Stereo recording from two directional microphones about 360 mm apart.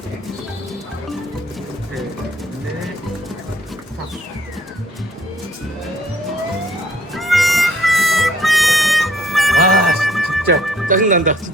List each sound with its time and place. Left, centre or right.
7.1 s harmonica: centre
9.7 s gargling: centre
10.8 s speech: right